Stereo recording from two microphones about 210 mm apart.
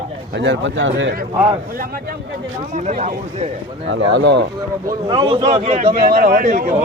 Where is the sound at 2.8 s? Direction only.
35° right (ahead or behind).